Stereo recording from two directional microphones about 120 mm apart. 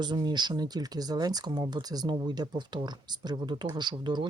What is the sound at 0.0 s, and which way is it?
Speech, 35° right (ahead or behind).